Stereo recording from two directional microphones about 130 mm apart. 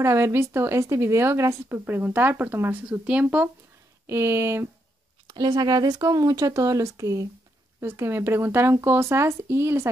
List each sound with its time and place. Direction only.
0.0 s speech: 20° right (ahead or behind)
5.3 s speech: 30° right (ahead or behind)